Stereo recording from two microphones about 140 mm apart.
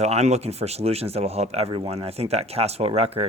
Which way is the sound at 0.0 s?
50° right (ahead or behind).